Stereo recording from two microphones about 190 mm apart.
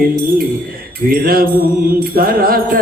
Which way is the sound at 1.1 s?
50° right (ahead or behind).